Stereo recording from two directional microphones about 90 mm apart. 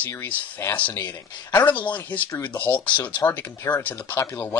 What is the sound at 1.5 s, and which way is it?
Speech, 20° left (ahead or behind).